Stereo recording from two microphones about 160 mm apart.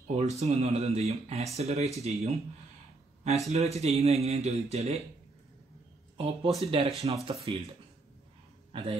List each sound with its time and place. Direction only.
0.1 s speech: 45° right (ahead or behind)
3.4 s speech: 40° right (ahead or behind)
6.1 s speech: 35° right (ahead or behind)